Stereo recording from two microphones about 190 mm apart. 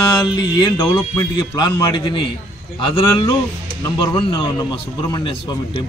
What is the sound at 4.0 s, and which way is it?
Speech, 25° left (ahead or behind).